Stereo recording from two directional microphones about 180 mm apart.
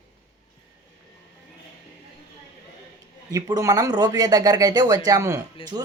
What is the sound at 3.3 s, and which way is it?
Speech, 20° right (ahead or behind).